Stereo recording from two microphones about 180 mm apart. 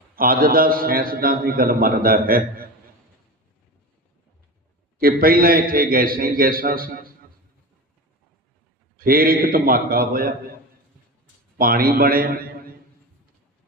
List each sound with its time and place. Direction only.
0.2 s a man's voice: 55° right (ahead or behind)
4.9 s a man's voice: 55° right (ahead or behind)
9.0 s a man's voice: 55° right (ahead or behind)
11.5 s a man's voice: 55° right (ahead or behind)